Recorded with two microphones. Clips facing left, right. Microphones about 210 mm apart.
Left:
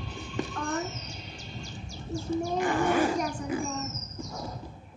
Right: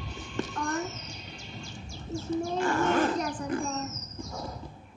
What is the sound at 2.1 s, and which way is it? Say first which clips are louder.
Wild animals: left 1 dB; 15° left (ahead or behind).